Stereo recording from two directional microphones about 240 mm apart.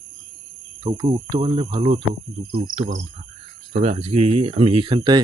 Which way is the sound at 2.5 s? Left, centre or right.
Right.